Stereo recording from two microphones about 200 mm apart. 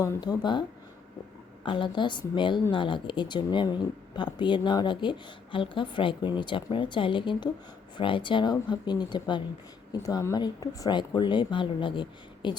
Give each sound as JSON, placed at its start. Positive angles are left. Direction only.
{"t": 0.0, "sound": "a woman's voice", "side_deg": 20}
{"t": 1.6, "sound": "a woman's voice", "side_deg": 25}